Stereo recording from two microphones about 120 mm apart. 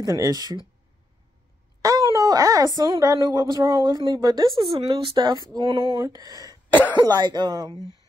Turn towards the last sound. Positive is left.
turn(degrees=-35)  # may be behind; listen again after turning